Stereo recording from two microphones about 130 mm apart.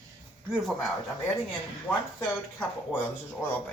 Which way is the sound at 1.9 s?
10° left (ahead or behind).